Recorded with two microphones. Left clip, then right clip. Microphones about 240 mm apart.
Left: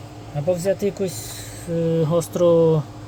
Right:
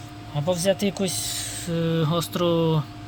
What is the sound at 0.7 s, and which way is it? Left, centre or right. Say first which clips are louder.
Speech: left 2 dB; right.